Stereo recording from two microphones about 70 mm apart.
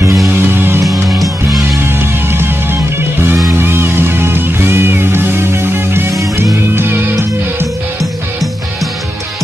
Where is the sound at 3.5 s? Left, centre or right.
Right.